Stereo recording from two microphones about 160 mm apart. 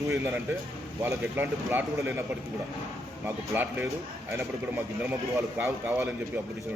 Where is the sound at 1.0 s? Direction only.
15° right (ahead or behind).